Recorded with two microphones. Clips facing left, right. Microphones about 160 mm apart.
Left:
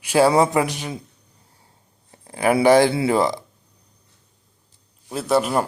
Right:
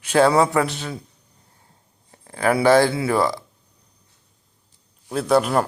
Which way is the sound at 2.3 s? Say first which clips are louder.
Left 1 dB; 15° left (ahead or behind).